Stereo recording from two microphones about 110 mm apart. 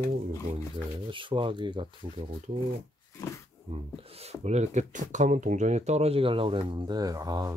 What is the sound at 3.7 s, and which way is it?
Speech, 65° right (ahead or behind).